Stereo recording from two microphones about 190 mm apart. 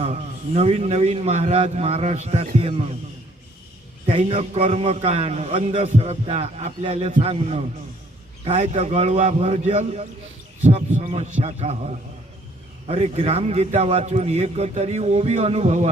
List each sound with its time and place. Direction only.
0.0 s a man's voice: 30° right (ahead or behind)
4.0 s a man's voice: 30° right (ahead or behind)